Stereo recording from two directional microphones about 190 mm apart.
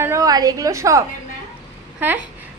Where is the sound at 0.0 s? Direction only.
15° right (ahead or behind).